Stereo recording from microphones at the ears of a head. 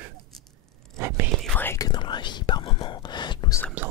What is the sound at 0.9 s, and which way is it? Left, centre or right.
Whispering, right.